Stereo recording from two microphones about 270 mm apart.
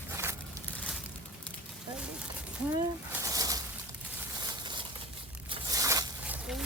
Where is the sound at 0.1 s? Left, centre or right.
Centre.